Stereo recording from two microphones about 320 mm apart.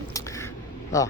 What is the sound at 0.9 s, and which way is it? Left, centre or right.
Speech, centre.